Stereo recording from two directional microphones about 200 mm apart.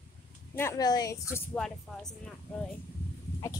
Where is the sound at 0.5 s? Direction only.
15° left (ahead or behind).